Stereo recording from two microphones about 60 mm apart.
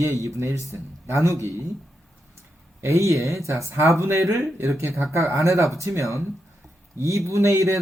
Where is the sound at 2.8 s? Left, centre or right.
Right.